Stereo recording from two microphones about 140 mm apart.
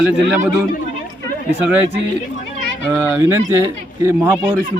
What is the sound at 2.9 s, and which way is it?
Speech, 15° right (ahead or behind).